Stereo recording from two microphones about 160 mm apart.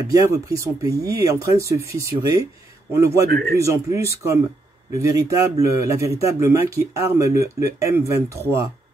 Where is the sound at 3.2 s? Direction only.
75° right (ahead or behind).